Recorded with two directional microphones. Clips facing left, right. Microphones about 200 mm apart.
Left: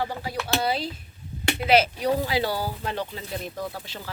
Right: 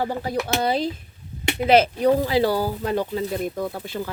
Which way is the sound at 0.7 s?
45° right (ahead or behind).